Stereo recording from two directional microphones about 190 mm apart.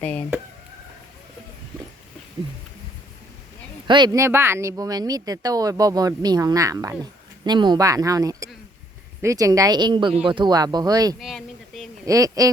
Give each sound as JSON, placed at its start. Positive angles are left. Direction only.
{"t": 0.0, "sound": "speech", "side_deg": 10}
{"t": 3.8, "sound": "speech", "side_deg": -25}
{"t": 11.2, "sound": "a sound", "side_deg": 0}
{"t": 12.0, "sound": "a man's voice", "side_deg": -15}